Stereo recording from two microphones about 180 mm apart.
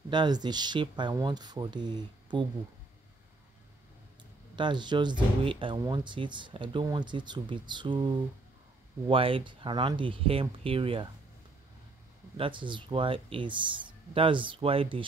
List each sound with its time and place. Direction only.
0.1 s speech: 25° right (ahead or behind)
4.6 s speech: 25° right (ahead or behind)
9.1 s speech: 30° right (ahead or behind)
12.4 s speech: 25° right (ahead or behind)